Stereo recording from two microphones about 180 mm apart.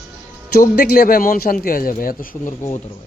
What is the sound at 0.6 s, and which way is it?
A man's voice, 55° left (ahead or behind).